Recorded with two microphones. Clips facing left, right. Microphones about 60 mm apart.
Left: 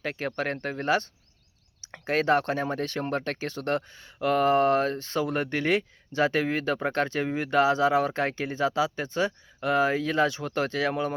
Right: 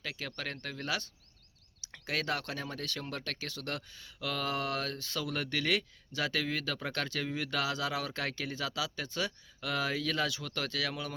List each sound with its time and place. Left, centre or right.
0.0 s speech: left